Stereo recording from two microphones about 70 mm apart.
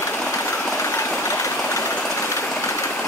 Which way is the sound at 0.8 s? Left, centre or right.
Left.